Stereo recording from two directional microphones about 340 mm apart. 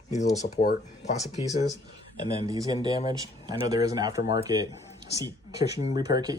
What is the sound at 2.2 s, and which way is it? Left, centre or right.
Speech, centre.